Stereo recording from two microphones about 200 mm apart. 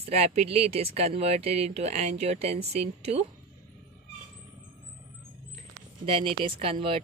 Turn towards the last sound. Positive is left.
turn(degrees=-30)  # may be behind; listen again after turning